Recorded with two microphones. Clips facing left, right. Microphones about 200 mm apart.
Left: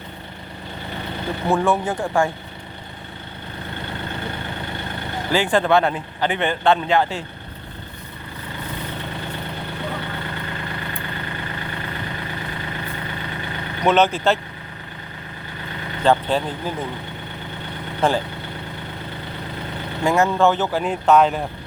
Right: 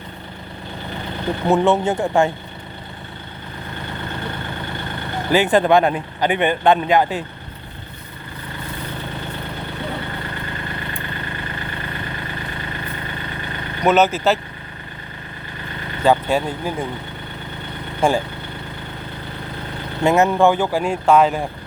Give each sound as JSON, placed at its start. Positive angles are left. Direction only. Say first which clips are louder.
{"t": 1.5, "sound": "speech", "louder": "right 3 dB", "side_deg": -20}
{"t": 5.3, "sound": "speech", "louder": "right 3 dB", "side_deg": -20}
{"t": 13.8, "sound": "speech", "louder": "right 1 dB", "side_deg": -5}
{"t": 16.0, "sound": "speech", "louder": "right 2 dB", "side_deg": -10}
{"t": 18.0, "sound": "speech", "louder": "right 2 dB", "side_deg": -10}
{"t": 20.1, "sound": "speech", "louder": "right 3 dB", "side_deg": -20}